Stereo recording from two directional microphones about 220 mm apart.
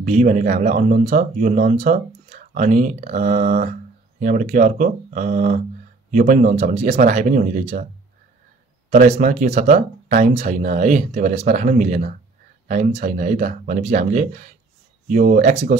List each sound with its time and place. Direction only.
0.0 s speech: 35° right (ahead or behind)
8.9 s speech: 35° right (ahead or behind)